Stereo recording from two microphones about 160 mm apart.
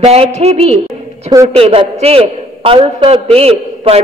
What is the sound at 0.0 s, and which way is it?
A man's voice, 40° right (ahead or behind).